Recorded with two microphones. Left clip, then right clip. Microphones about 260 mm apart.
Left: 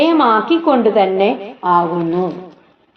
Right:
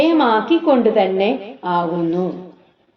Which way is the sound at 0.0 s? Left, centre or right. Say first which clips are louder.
Left 2 dB; left.